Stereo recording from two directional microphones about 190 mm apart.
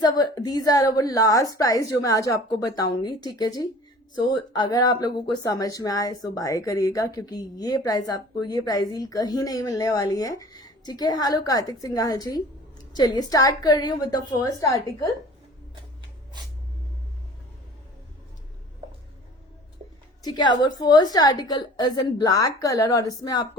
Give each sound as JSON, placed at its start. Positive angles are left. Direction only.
{"t": 0.0, "sound": "speech", "side_deg": 20}
{"t": 20.2, "sound": "speech", "side_deg": 25}